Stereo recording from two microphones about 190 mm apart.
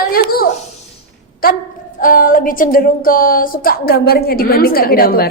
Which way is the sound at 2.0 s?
45° left (ahead or behind).